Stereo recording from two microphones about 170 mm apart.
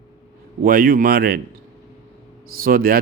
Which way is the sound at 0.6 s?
55° right (ahead or behind).